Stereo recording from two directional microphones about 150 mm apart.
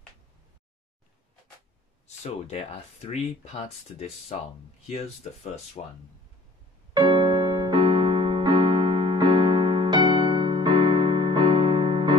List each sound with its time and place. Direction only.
2.0 s speech: 50° left (ahead or behind)
6.9 s keyboard: 30° right (ahead or behind)